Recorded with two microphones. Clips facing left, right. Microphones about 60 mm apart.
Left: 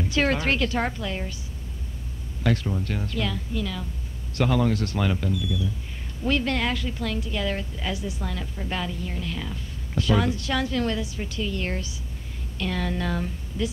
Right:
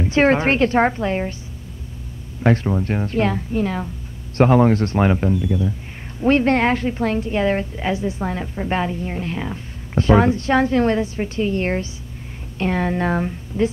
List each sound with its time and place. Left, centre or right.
0.0 s a woman's voice: right
2.4 s a woman's voice: right